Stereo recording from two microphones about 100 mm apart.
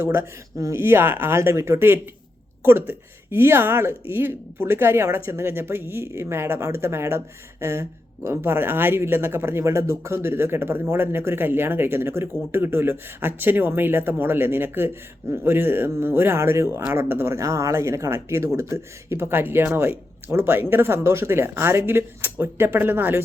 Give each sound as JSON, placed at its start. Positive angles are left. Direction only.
{"t": 0.0, "sound": "speech", "side_deg": -25}